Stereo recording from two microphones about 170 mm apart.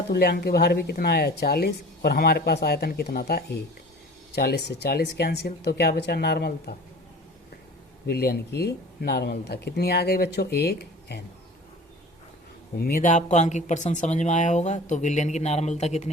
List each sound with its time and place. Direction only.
0.1 s speech: 70° left (ahead or behind)
8.0 s speech: 65° left (ahead or behind)
12.8 s speech: 55° left (ahead or behind)